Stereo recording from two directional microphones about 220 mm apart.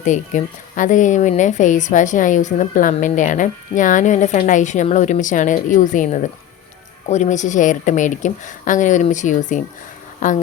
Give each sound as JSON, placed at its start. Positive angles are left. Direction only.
{"t": 0.0, "sound": "speech", "side_deg": 35}